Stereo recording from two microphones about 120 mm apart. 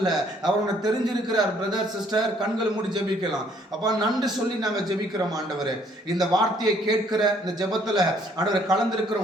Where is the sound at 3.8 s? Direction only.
35° right (ahead or behind).